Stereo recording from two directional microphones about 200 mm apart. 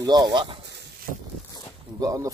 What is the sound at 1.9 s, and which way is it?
Speech, 20° right (ahead or behind).